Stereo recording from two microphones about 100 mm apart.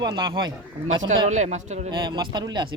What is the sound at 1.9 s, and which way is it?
Speech, 50° right (ahead or behind).